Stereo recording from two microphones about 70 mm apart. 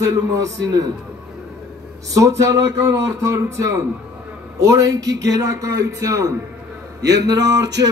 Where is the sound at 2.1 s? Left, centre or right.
Right.